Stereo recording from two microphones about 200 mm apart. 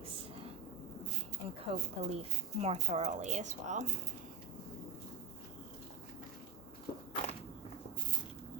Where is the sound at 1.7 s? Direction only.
30° right (ahead or behind).